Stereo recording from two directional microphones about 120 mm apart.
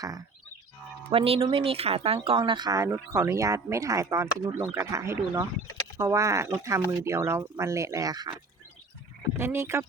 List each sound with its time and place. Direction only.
1.1 s speech: 50° right (ahead or behind)
2.4 s speech: 35° right (ahead or behind)
9.3 s speech: 20° right (ahead or behind)